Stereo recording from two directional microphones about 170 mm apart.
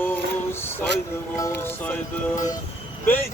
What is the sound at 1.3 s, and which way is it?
Speech, 15° left (ahead or behind).